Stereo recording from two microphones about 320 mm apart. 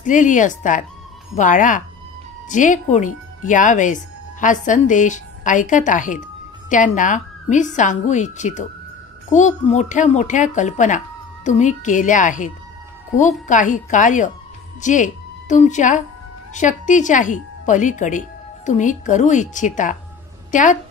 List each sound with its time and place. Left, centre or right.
0.0 s a woman's voice: left